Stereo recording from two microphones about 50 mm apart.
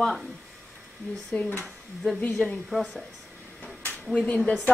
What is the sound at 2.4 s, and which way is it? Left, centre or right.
Speech, centre.